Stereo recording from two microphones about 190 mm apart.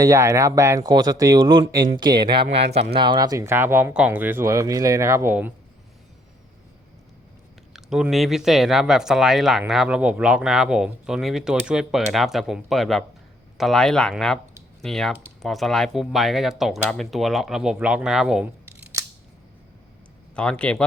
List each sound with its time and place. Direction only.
0.0 s speech: 15° right (ahead or behind)
7.7 s speech: centre (ahead or behind)
20.3 s speech: 5° left (ahead or behind)